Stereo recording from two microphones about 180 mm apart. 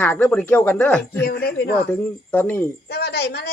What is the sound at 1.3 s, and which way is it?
Speech, 60° left (ahead or behind).